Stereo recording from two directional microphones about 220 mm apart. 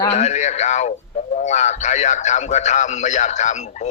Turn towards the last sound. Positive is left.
turn(degrees=30)  # may be behind; listen again after turning